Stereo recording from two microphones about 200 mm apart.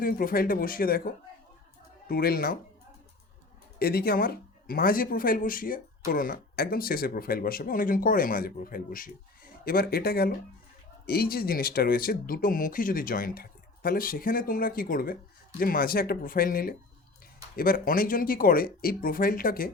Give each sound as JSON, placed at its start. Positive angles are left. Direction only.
{"t": 0.0, "sound": "speech", "side_deg": 45}
{"t": 3.8, "sound": "speech", "side_deg": 50}